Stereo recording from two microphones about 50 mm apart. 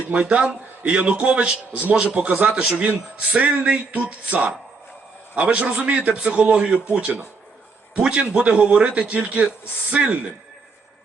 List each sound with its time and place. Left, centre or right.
0.1 s a man's voice: right